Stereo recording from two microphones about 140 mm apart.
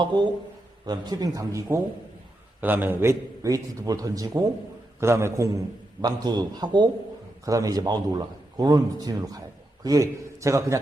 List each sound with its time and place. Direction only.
0.0 s a man's voice: 35° right (ahead or behind)
2.6 s a man's voice: 15° right (ahead or behind)